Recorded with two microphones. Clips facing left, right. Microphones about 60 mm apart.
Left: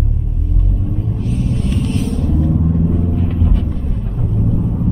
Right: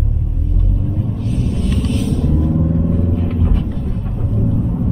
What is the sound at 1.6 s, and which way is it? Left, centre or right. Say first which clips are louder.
Vehicle: even; left.